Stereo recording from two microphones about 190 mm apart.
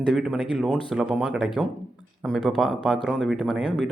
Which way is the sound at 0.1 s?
Centre (ahead or behind).